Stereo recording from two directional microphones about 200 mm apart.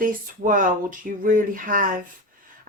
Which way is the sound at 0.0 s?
40° right (ahead or behind).